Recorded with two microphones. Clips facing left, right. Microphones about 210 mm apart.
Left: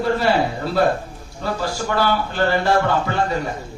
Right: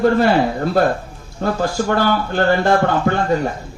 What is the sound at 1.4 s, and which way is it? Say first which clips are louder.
A man's voice: right 5 dB; 50° right (ahead or behind).